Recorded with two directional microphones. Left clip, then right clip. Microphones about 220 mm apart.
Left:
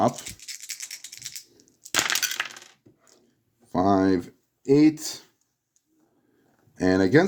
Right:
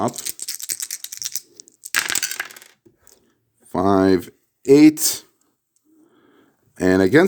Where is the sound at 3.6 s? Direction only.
30° right (ahead or behind).